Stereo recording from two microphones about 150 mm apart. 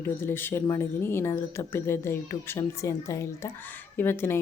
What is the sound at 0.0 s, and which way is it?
Speech, 15° left (ahead or behind).